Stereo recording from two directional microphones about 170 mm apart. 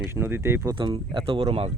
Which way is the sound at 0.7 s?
30° right (ahead or behind).